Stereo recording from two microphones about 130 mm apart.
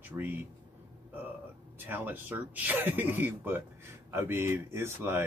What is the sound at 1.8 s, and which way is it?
Speech, 15° right (ahead or behind).